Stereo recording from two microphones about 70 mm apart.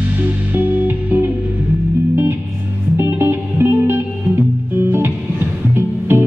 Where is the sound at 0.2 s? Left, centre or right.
Right.